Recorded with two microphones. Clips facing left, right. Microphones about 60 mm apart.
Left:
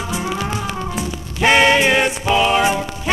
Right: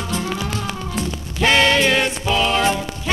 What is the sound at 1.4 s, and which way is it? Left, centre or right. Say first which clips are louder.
Music: left 3 dB; centre.